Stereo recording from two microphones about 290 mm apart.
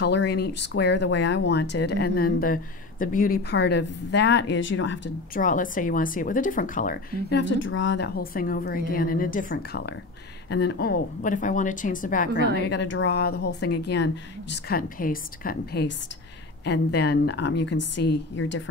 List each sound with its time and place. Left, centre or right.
0.0 s a woman's voice: left
12.6 s speech: left